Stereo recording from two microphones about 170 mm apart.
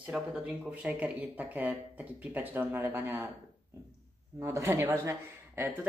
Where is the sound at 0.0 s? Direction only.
5° right (ahead or behind).